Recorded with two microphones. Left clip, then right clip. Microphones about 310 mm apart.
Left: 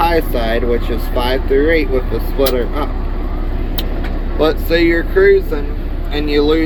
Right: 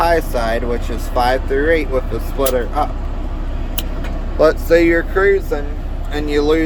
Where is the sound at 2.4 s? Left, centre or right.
Centre.